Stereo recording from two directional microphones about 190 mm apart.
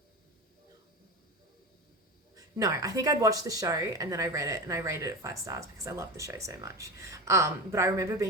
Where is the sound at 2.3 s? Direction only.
15° right (ahead or behind).